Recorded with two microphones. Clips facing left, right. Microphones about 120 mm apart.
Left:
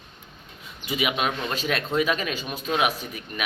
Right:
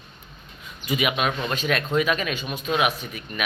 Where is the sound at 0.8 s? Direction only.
25° left (ahead or behind).